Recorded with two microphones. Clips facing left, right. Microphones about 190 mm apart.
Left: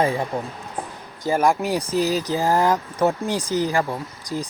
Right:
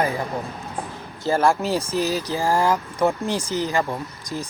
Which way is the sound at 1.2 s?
15° left (ahead or behind).